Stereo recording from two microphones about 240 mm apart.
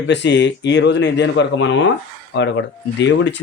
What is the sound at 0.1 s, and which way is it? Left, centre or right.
Speech, left.